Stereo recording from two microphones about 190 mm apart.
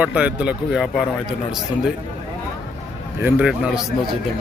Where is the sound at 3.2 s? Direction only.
5° right (ahead or behind).